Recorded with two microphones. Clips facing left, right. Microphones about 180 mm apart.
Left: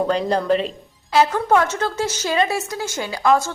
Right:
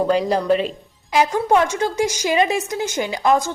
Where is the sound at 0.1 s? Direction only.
5° right (ahead or behind).